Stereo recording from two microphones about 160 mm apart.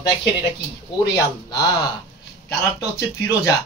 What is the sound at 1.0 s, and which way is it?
Speech, 20° left (ahead or behind).